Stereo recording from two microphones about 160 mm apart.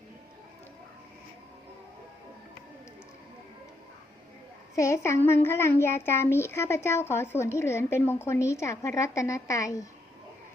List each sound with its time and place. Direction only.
4.7 s speech: 20° left (ahead or behind)